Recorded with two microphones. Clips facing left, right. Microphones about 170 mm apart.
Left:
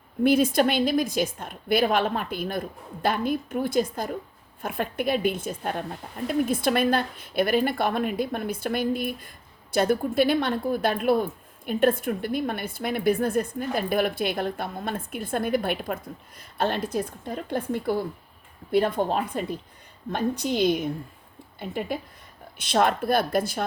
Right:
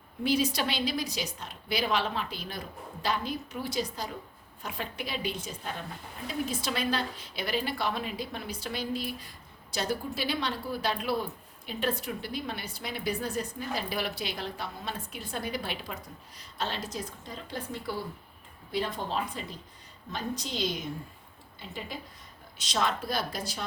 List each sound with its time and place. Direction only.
0.2 s a woman's voice: 55° left (ahead or behind)